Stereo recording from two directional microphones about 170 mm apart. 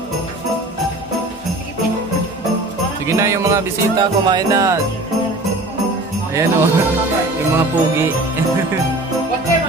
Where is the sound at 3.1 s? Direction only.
15° right (ahead or behind).